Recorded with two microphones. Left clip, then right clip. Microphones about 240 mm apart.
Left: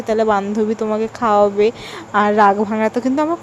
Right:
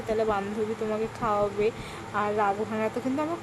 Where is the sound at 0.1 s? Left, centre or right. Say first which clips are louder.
Left 11 dB; left.